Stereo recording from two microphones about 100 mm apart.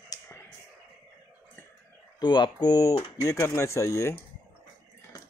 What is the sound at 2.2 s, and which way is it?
Speech, 45° left (ahead or behind).